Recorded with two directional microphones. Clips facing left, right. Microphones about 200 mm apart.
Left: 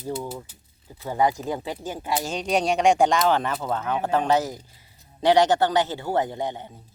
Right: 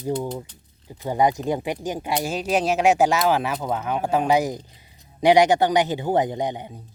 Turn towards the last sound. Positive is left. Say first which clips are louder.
# right 3 dB
turn(degrees=-15)  # may be behind; listen again after turning